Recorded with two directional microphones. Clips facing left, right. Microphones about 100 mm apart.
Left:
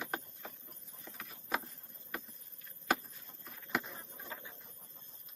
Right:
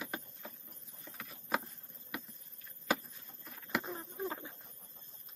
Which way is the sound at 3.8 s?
35° right (ahead or behind).